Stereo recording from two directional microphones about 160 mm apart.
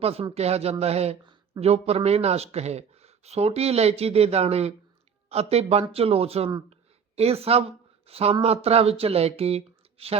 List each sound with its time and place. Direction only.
0.0 s speech: 40° right (ahead or behind)